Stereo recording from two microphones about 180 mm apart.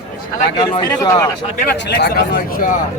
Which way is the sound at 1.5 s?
60° left (ahead or behind).